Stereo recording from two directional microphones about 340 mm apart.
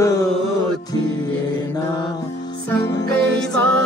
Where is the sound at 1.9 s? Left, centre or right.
Centre.